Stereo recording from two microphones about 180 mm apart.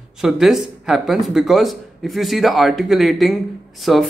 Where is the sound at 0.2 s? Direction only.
5° right (ahead or behind).